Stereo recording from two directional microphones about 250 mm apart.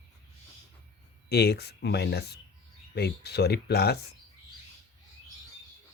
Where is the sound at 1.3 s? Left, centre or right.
Left.